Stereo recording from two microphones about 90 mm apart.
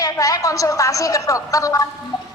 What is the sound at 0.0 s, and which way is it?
A woman's voice, 40° left (ahead or behind).